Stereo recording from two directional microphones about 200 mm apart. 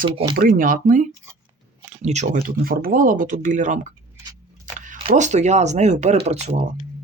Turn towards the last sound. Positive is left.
turn(degrees=-35)  # may be behind; listen again after turning